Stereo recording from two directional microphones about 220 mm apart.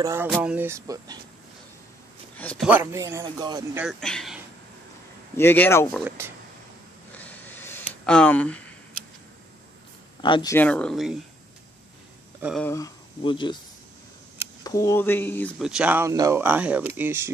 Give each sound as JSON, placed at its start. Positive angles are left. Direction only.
{"t": 0.0, "sound": "speech", "side_deg": -10}
{"t": 2.3, "sound": "a man's voice", "side_deg": 5}
{"t": 2.7, "sound": "speech", "side_deg": -10}
{"t": 3.8, "sound": "speech", "side_deg": 0}
{"t": 5.4, "sound": "speech", "side_deg": 10}
{"t": 5.9, "sound": "speech", "side_deg": -10}
{"t": 7.2, "sound": "a sound", "side_deg": 5}
{"t": 10.2, "sound": "speech", "side_deg": 20}
{"t": 12.4, "sound": "speech", "side_deg": -5}
{"t": 12.6, "sound": "speech", "side_deg": 15}
{"t": 14.6, "sound": "speech", "side_deg": 15}
{"t": 15.6, "sound": "speech", "side_deg": -5}